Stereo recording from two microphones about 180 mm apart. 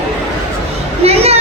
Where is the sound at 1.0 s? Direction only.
35° right (ahead or behind).